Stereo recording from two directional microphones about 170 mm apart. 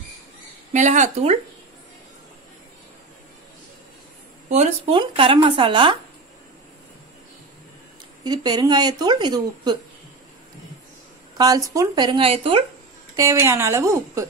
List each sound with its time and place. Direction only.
0.7 s speech: 45° right (ahead or behind)
4.5 s speech: 40° right (ahead or behind)
4.9 s speech: 30° right (ahead or behind)
8.2 s speech: 25° right (ahead or behind)
11.3 s speech: 20° right (ahead or behind)
13.1 s a woman's voice: 15° right (ahead or behind)